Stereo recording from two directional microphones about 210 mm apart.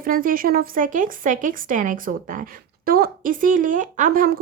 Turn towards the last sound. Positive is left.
turn(degrees=-40)  # may be behind; listen again after turning